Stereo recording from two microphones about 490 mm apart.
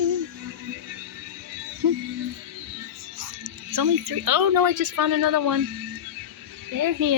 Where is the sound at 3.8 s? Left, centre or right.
Right.